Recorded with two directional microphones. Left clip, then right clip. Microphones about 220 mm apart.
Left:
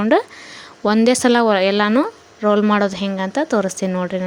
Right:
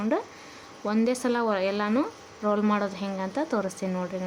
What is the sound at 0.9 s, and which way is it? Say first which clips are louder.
A woman's voice: left 12 dB; 35° left (ahead or behind).